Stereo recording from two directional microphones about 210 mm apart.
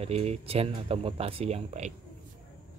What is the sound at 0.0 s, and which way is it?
Speech, 30° right (ahead or behind).